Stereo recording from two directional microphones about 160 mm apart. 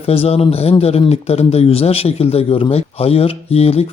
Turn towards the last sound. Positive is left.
turn(degrees=40)  # may be behind; listen again after turning